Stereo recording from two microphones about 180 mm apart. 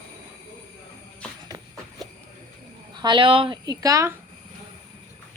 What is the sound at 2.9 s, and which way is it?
A woman's voice, 25° right (ahead or behind).